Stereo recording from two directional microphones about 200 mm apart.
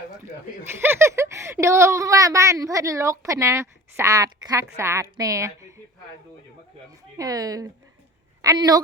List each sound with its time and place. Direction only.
0.8 s speech: 10° right (ahead or behind)
7.2 s a woman's voice: 20° right (ahead or behind)